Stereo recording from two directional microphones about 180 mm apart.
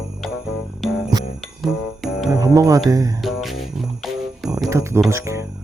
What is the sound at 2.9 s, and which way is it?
Music, 20° right (ahead or behind).